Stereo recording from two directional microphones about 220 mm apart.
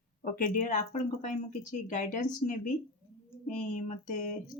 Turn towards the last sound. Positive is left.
turn(degrees=35)  # may be behind; listen again after turning